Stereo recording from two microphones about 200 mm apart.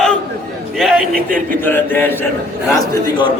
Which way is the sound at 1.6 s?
10° left (ahead or behind).